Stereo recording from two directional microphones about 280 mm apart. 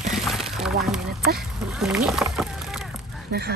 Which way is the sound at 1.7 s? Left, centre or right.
Centre.